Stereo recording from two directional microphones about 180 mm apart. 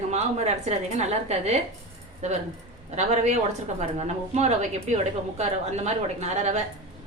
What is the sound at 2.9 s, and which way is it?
A woman's voice, 40° right (ahead or behind).